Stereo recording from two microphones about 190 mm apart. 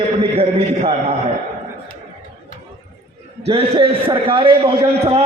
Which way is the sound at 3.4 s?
30° right (ahead or behind).